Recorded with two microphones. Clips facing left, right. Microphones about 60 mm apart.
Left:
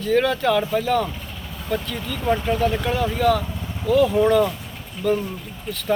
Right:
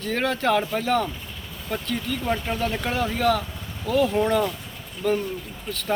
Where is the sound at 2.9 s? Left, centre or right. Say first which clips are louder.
Even; right.